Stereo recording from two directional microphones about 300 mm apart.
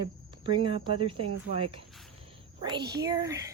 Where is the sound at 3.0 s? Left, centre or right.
Centre.